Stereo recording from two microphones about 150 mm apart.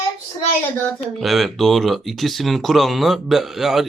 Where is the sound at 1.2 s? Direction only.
Centre (ahead or behind).